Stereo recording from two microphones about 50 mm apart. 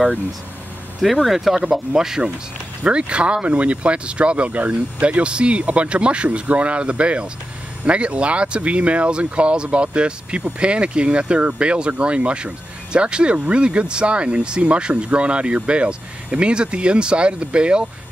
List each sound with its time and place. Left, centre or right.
1.2 s speech: centre
1.6 s speech: centre